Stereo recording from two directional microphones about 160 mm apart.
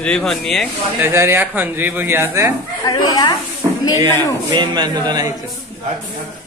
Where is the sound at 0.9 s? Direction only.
15° right (ahead or behind).